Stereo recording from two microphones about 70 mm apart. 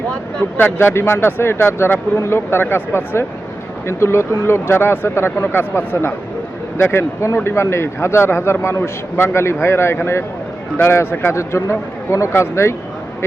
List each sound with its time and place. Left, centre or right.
0.5 s a man's voice: left
11.3 s a man's voice: left